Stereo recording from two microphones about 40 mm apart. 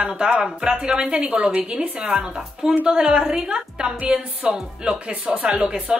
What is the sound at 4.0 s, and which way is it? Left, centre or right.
A woman's voice, right.